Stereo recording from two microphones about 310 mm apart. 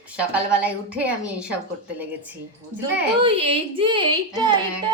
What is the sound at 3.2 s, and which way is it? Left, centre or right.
A woman's voice, centre.